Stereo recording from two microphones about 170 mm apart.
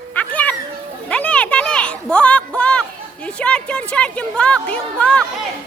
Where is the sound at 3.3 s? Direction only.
5° left (ahead or behind).